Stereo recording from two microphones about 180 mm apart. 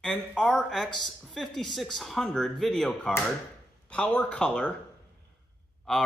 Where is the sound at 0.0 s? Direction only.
5° left (ahead or behind).